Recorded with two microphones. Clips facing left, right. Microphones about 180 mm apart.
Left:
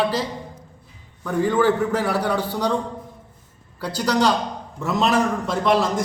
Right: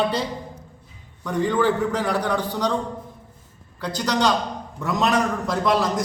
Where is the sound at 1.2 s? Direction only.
5° left (ahead or behind).